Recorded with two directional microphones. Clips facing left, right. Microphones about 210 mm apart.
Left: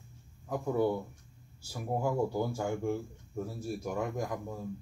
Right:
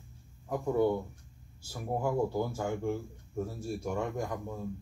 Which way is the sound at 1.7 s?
10° left (ahead or behind).